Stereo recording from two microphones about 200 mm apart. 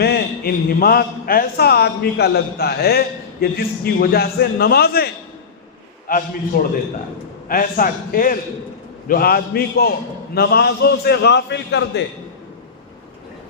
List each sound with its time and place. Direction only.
0.0 s a man's voice: 50° left (ahead or behind)